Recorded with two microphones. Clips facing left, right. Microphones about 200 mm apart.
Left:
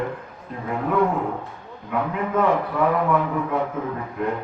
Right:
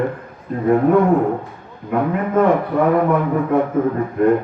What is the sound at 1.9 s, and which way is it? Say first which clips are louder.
A man's voice: right 6 dB; 50° right (ahead or behind).